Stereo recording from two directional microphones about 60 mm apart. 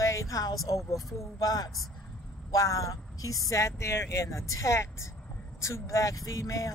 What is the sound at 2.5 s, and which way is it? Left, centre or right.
Speech, left.